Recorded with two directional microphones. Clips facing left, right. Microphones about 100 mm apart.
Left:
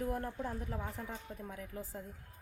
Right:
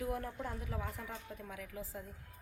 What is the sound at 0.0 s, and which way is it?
Speech, 40° left (ahead or behind).